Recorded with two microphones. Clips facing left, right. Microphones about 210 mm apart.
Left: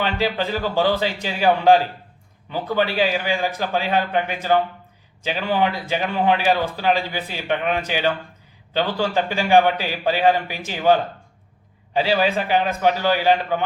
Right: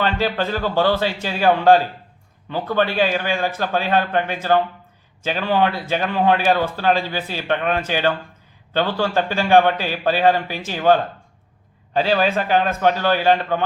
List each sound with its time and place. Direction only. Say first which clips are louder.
0.0 s a man's voice: right 1 dB; 15° left (ahead or behind)